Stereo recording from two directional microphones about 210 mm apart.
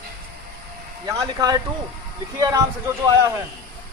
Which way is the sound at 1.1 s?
20° right (ahead or behind).